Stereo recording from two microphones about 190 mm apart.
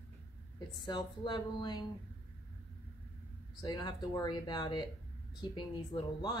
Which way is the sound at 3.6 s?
20° left (ahead or behind).